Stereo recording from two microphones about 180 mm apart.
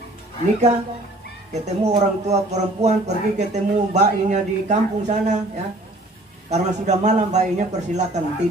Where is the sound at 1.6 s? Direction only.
40° right (ahead or behind).